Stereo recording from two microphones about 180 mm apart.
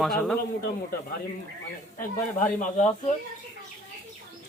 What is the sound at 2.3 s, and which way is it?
Speech, 45° left (ahead or behind).